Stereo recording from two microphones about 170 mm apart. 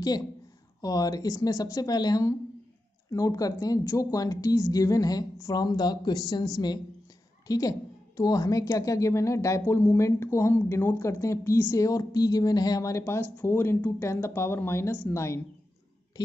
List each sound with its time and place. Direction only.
0.7 s a woman's voice: 20° left (ahead or behind)